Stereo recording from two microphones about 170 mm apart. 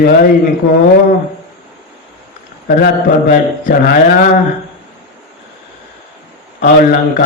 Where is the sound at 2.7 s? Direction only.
60° left (ahead or behind).